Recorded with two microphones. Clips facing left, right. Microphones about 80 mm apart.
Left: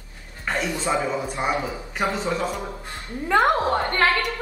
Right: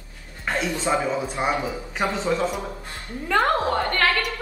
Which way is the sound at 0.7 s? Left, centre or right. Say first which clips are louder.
Right 2 dB; right.